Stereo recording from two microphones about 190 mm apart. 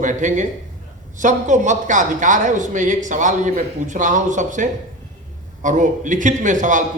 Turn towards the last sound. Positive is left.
turn(degrees=-40)  # may be behind; listen again after turning